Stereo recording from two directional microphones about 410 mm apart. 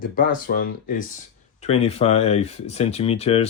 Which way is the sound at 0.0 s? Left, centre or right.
Centre.